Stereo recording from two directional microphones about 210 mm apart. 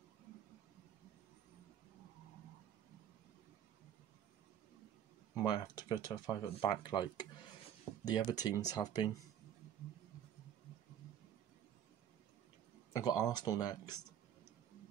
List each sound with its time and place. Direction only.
5.3 s speech: 20° left (ahead or behind)
12.9 s speech: 15° left (ahead or behind)